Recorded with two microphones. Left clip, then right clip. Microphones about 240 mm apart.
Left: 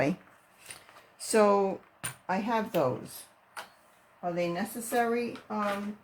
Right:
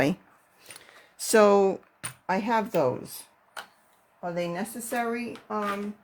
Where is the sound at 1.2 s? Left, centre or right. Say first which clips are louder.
Right 5 dB; right.